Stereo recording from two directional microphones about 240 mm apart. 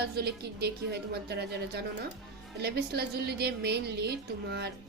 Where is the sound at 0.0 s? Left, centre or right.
Right.